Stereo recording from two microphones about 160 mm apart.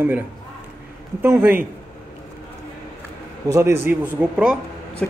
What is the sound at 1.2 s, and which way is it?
Speech, 15° right (ahead or behind).